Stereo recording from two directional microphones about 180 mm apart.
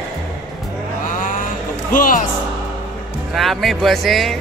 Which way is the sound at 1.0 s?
45° left (ahead or behind).